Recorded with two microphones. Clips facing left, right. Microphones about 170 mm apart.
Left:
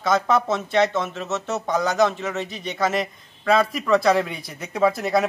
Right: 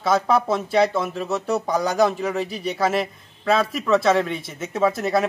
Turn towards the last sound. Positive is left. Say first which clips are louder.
# even
turn(degrees=0)  # may be behind; listen again after turning